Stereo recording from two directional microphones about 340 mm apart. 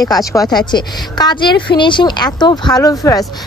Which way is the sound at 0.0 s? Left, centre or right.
Centre.